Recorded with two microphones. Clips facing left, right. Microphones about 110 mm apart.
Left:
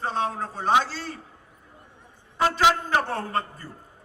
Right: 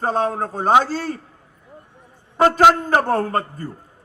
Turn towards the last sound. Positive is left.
turn(degrees=-45)  # may be behind; listen again after turning